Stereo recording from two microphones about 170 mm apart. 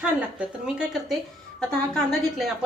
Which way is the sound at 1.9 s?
5° left (ahead or behind).